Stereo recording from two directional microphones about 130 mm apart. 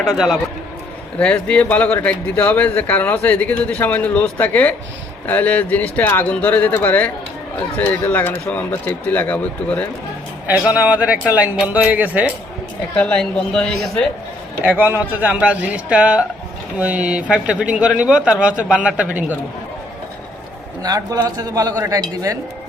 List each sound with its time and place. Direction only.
0.0 s a man's voice: centre (ahead or behind)
10.6 s speech: 10° right (ahead or behind)
13.0 s speech: 10° left (ahead or behind)
14.6 s speech: 15° right (ahead or behind)
20.8 s a man's voice: 30° right (ahead or behind)